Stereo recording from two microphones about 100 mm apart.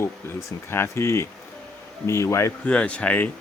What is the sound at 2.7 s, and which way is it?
Speech, 10° left (ahead or behind).